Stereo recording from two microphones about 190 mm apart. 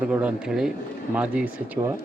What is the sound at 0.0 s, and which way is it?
Speech, 5° right (ahead or behind).